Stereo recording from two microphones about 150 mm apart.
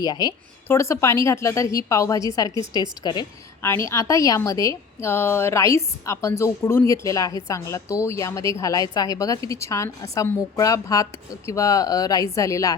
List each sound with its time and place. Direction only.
0.0 s a woman's voice: 25° left (ahead or behind)
3.6 s a woman's voice: 15° left (ahead or behind)